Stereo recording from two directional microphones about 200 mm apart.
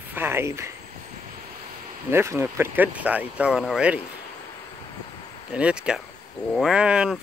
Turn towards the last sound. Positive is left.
turn(degrees=-5)  # may be behind; listen again after turning